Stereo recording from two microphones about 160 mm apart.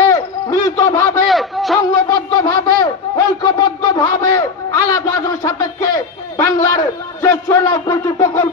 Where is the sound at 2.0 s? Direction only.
25° left (ahead or behind).